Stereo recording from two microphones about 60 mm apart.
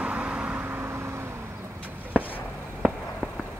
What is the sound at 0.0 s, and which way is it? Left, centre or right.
Vehicle, right.